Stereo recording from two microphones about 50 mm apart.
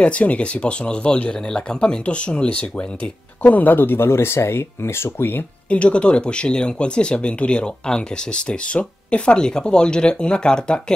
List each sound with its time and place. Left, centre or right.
0.0 s speech: left
1.3 s speech: centre; by 5.4 s left
5.7 s speech: left